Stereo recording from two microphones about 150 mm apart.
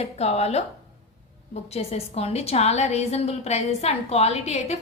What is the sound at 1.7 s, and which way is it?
A woman's voice, 45° left (ahead or behind).